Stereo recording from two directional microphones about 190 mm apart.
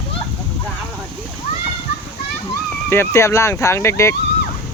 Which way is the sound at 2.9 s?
15° left (ahead or behind).